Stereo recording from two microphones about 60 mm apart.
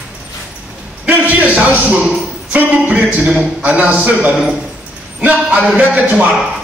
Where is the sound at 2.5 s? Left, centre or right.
Right.